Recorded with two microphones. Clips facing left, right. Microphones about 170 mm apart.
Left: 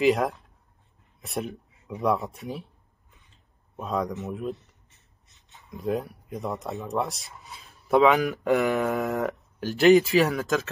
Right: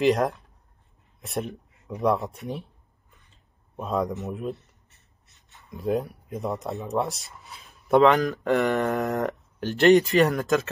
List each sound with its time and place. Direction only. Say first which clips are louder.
0.0 s speech: right 1 dB; centre (ahead or behind)
3.7 s speech: right 2 dB; centre (ahead or behind)
4.9 s a sound: even; 20° left (ahead or behind)
5.7 s speech: right 2 dB; centre (ahead or behind)